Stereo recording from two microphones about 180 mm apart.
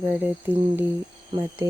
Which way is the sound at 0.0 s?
10° right (ahead or behind).